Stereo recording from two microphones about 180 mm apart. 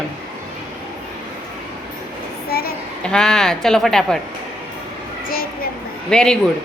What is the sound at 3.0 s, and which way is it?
A man's voice, 5° left (ahead or behind).